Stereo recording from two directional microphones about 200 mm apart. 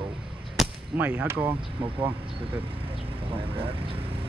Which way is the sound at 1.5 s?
25° right (ahead or behind).